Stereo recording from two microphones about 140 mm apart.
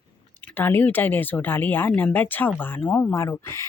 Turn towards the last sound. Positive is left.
turn(degrees=20)  # may be behind; listen again after turning